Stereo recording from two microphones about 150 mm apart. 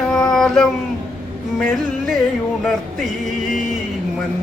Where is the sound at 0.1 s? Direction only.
5° left (ahead or behind).